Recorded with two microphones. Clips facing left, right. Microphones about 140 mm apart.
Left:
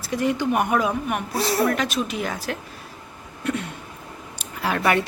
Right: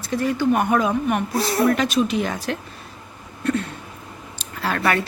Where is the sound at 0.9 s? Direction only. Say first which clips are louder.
Right 4 dB; 5° left (ahead or behind).